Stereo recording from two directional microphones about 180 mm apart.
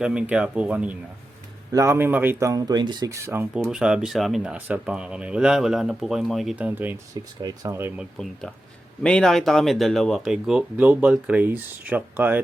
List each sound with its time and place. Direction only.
0.0 s speech: 5° right (ahead or behind)
3.5 s speech: 5° right (ahead or behind)
8.2 s speech: 5° left (ahead or behind)